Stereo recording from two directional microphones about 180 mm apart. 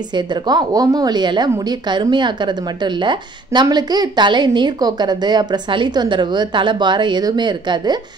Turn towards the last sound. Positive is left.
turn(degrees=-25)  # may be behind; listen again after turning